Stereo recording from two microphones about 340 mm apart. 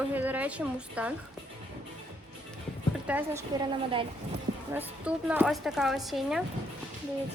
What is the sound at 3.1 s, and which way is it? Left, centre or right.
Speech, centre.